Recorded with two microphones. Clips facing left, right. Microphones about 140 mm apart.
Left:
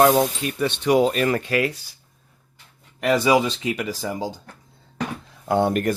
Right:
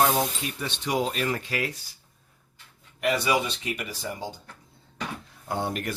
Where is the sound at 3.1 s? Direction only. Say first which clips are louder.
Left 8 dB; 90° left.